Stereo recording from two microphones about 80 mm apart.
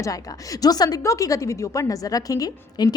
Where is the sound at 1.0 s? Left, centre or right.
Left.